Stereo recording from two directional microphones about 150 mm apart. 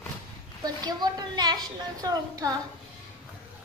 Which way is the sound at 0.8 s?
25° right (ahead or behind).